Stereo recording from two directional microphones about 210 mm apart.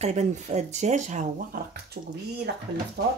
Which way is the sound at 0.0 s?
35° right (ahead or behind).